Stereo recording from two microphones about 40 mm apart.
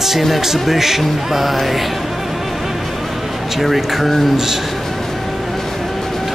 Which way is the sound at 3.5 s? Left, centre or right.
Centre.